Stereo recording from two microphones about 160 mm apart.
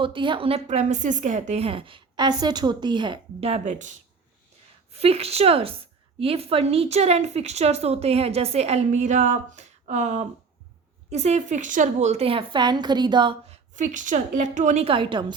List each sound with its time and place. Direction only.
0.0 s a woman's voice: 30° right (ahead or behind)
13.5 s a woman's voice: 50° right (ahead or behind); by 15.3 s 30° right (ahead or behind)